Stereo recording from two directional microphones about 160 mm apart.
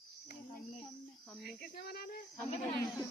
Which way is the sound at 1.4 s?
80° left.